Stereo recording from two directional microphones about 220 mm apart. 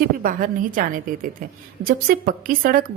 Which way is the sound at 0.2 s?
40° right (ahead or behind).